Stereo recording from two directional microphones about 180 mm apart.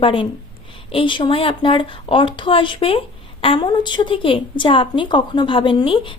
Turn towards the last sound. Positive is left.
turn(degrees=30)  # may be behind; listen again after turning